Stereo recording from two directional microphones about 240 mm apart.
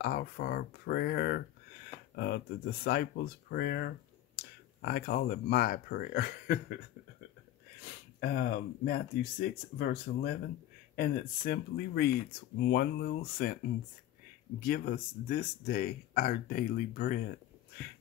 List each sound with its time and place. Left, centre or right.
0.0 s speech: left
8.2 s speech: left
14.6 s speech: left